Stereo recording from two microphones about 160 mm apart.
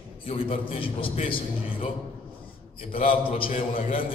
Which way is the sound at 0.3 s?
35° left (ahead or behind).